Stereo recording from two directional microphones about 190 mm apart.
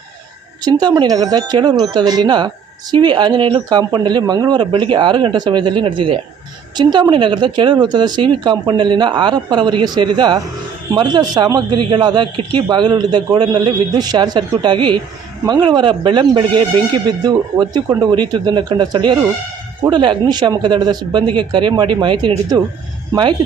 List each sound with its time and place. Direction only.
0.6 s a man's voice: 20° right (ahead or behind)